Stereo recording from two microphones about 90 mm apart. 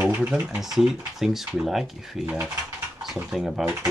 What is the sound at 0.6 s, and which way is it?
Speech, 5° right (ahead or behind).